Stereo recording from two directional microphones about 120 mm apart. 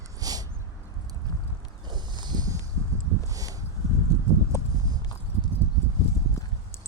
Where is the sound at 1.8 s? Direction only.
35° right (ahead or behind).